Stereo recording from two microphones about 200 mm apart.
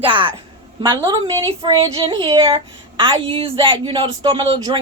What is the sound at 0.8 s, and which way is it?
Speech, 20° right (ahead or behind).